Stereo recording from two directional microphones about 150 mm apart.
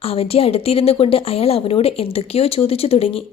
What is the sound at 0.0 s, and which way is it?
Speech, 40° left (ahead or behind).